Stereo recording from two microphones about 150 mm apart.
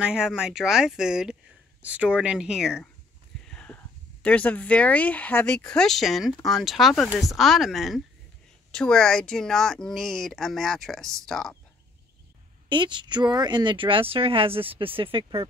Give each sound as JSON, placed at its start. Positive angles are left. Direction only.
{"t": 0.0, "sound": "speech", "side_deg": -5}
{"t": 3.4, "sound": "speech", "side_deg": 5}
{"t": 12.6, "sound": "speech", "side_deg": -30}